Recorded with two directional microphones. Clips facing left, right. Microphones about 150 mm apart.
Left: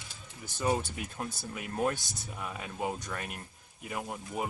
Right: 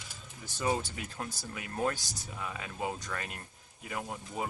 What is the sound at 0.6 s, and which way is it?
Speech, 15° left (ahead or behind).